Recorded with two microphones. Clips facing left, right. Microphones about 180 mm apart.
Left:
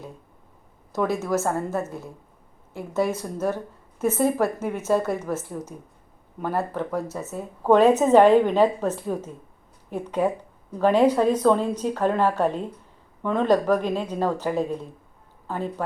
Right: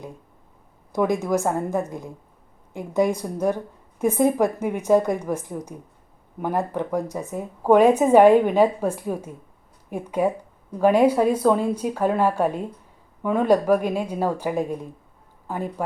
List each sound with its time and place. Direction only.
0.9 s a woman's voice: 15° right (ahead or behind)